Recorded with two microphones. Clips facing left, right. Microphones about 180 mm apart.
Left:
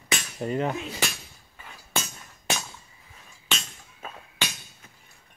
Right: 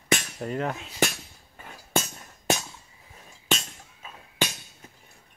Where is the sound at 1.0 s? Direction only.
45° right (ahead or behind).